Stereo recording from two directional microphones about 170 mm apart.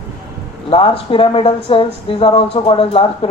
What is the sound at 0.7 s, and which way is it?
Speech, 30° left (ahead or behind).